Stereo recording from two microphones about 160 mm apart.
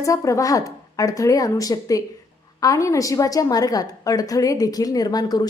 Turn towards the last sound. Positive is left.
turn(degrees=25)  # may be behind; listen again after turning